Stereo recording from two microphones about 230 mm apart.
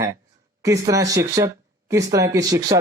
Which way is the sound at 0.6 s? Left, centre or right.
Centre.